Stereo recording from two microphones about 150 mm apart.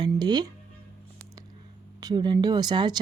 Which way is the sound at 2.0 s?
30° right (ahead or behind).